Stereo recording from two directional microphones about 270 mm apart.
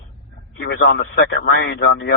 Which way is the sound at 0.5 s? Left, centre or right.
Left.